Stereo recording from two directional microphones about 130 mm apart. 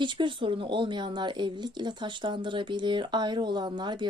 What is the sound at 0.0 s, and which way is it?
Speech, 40° right (ahead or behind).